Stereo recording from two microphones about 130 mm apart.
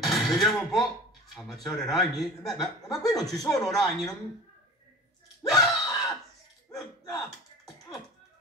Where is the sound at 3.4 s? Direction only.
25° left (ahead or behind).